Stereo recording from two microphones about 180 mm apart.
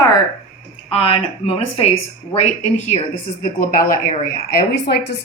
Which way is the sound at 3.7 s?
50° left (ahead or behind).